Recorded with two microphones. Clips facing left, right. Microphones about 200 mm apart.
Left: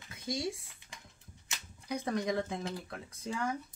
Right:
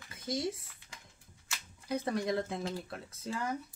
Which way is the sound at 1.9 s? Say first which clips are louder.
Right 1 dB; 5° right (ahead or behind).